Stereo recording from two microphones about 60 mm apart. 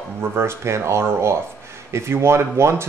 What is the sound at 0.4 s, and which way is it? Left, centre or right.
Speech, right.